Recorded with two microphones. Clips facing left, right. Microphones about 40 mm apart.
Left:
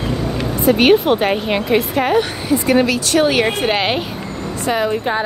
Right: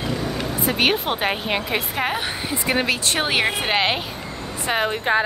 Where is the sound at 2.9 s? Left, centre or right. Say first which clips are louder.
Left 6 dB; right.